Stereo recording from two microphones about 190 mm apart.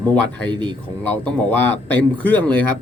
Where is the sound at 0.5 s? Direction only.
25° right (ahead or behind).